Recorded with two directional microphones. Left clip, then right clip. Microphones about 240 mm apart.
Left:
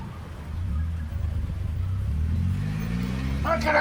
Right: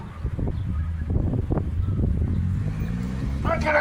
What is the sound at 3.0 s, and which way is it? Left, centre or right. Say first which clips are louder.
Vehicle: left 1 dB; left.